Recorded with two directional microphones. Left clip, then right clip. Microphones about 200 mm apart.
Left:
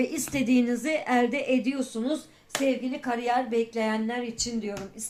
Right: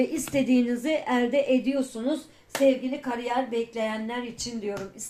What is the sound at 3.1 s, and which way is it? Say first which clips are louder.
A woman's voice: left 2 dB; 35° left (ahead or behind).